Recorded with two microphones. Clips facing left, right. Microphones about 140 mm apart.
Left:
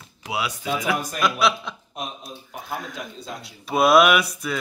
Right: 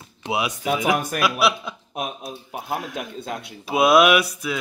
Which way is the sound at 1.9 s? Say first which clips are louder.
Right 6 dB; 60° right (ahead or behind).